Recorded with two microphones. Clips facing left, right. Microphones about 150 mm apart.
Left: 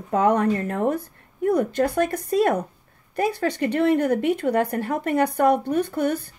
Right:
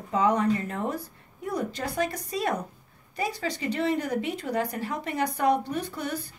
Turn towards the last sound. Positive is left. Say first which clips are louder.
# left 9 dB
turn(degrees=55)  # may be behind; listen again after turning